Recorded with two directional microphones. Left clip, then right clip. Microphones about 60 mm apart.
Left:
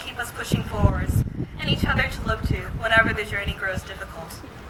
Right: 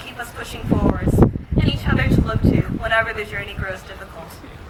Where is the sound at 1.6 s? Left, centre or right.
Left.